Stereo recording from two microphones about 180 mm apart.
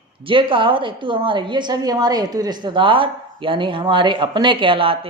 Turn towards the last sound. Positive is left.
turn(degrees=-30)  # may be behind; listen again after turning